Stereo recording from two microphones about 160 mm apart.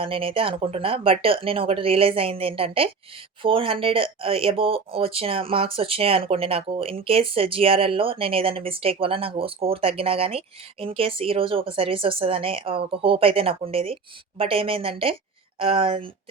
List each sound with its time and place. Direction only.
0.0 s speech: 35° right (ahead or behind)